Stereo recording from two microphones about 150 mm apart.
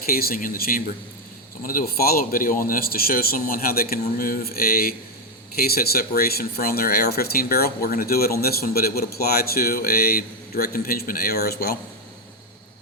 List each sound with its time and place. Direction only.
0.0 s a man's voice: 80° left